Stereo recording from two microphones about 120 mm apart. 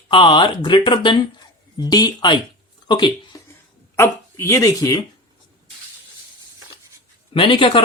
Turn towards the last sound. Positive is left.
turn(degrees=45)  # may be behind; listen again after turning